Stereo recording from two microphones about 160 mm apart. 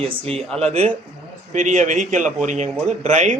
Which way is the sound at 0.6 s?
40° right (ahead or behind).